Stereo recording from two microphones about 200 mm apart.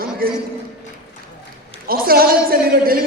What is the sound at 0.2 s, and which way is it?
Speech, 45° right (ahead or behind).